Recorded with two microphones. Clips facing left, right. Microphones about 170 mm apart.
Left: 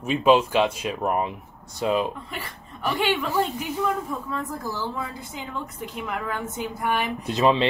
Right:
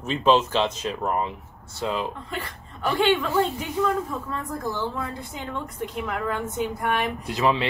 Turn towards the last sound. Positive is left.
turn(degrees=20)  # may be behind; listen again after turning